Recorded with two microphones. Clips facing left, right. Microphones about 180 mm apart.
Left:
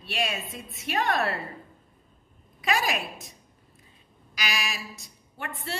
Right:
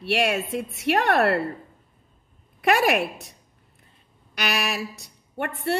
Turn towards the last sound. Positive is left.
turn(degrees=-60)  # may be behind; listen again after turning